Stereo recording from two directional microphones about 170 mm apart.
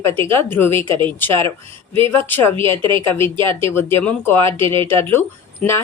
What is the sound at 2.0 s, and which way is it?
Speech, 10° left (ahead or behind).